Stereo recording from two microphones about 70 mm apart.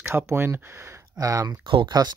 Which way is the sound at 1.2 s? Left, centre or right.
Right.